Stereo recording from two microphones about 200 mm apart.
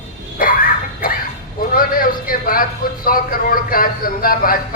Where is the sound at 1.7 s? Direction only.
45° left (ahead or behind).